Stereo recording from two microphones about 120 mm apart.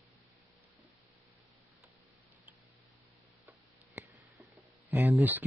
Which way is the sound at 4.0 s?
15° right (ahead or behind).